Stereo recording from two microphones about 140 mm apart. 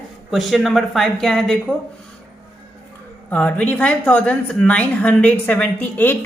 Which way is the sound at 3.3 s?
10° left (ahead or behind).